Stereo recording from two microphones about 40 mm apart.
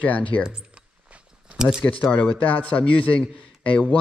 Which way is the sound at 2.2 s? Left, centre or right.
Left.